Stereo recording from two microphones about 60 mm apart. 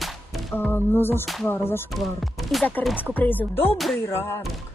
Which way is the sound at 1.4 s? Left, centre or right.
Left.